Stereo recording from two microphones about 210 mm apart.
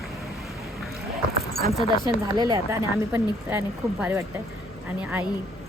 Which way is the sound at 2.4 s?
20° right (ahead or behind).